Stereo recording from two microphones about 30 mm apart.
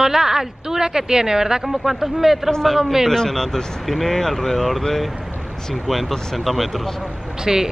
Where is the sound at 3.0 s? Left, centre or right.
Centre.